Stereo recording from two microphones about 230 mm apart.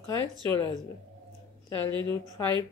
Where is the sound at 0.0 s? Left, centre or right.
Centre.